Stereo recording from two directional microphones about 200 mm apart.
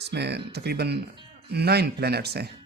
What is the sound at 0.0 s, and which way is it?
Speech, 55° right (ahead or behind).